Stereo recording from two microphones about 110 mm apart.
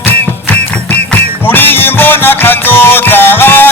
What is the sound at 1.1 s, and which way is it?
Music, 20° left (ahead or behind).